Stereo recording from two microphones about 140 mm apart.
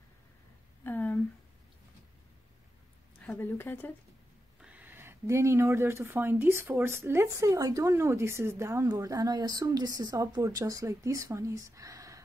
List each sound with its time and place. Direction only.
0.8 s a sound: 15° left (ahead or behind)
3.2 s a woman's voice: 10° left (ahead or behind)
4.6 s speech: 10° right (ahead or behind)